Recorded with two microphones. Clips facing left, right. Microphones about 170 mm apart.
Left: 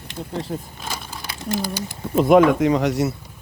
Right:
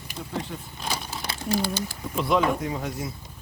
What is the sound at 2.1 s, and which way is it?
Speech, 45° left (ahead or behind).